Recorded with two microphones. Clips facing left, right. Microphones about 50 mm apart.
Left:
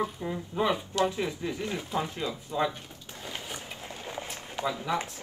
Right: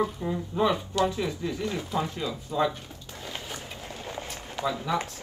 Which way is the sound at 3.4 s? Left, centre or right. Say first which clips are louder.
Right 1 dB; centre.